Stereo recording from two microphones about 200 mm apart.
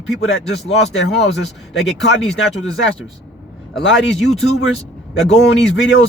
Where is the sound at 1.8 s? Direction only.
Centre (ahead or behind).